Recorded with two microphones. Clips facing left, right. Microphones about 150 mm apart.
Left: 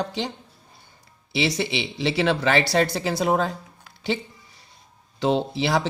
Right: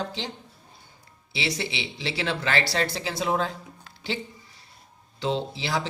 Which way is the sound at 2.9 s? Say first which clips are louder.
Left 4 dB; 50° left (ahead or behind).